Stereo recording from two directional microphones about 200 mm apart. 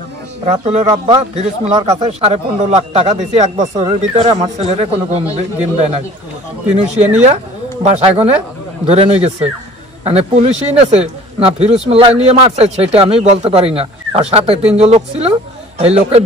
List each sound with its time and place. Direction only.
0.7 s speech: 30° right (ahead or behind)
6.7 s speech: 35° right (ahead or behind)